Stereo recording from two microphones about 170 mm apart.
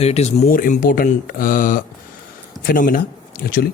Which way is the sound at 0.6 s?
55° left (ahead or behind).